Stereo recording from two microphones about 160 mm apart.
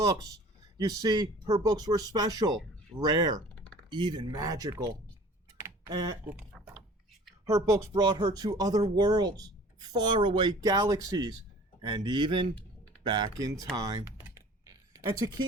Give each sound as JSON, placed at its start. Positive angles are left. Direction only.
{"t": 0.0, "sound": "speech", "side_deg": -25}
{"t": 5.5, "sound": "computer keyboard", "side_deg": -20}
{"t": 6.5, "sound": "a sound", "side_deg": 0}
{"t": 7.4, "sound": "speech", "side_deg": -20}
{"t": 13.7, "sound": "typing", "side_deg": -20}